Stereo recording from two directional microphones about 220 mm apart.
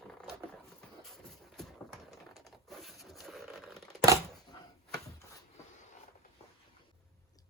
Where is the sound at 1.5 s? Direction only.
Centre (ahead or behind).